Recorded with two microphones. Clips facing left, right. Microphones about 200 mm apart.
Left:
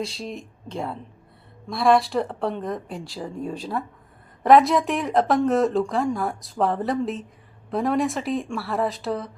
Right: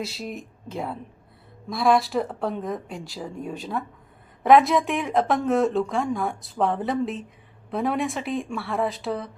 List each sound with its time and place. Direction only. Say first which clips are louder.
0.0 s speech: left 1 dB; 5° right (ahead or behind)